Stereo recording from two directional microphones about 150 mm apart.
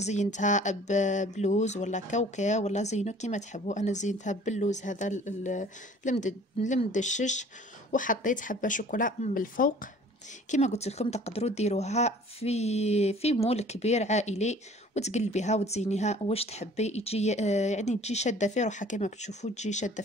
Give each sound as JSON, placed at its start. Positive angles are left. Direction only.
{"t": 0.0, "sound": "speech", "side_deg": 50}
{"t": 10.5, "sound": "speech", "side_deg": 50}